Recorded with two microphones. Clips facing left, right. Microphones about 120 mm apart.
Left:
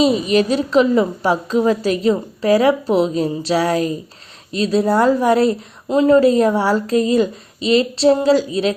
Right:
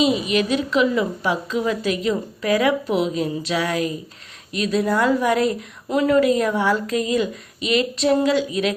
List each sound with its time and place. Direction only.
0.0 s a woman's voice: 35° left (ahead or behind)